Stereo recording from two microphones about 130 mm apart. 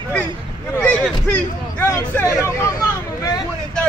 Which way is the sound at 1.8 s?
20° left (ahead or behind).